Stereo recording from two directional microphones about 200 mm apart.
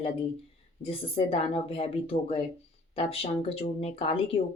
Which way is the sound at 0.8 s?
30° left (ahead or behind).